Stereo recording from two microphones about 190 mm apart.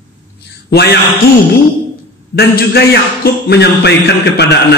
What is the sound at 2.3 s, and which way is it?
A man's voice, 60° left (ahead or behind).